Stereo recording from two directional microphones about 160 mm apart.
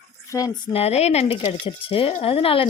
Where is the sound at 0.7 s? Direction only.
40° left (ahead or behind).